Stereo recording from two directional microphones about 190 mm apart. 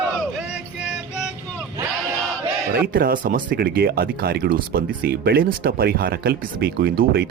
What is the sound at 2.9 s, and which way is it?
Speech, 50° right (ahead or behind).